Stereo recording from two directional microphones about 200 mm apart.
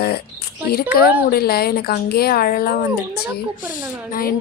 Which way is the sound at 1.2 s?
50° left (ahead or behind).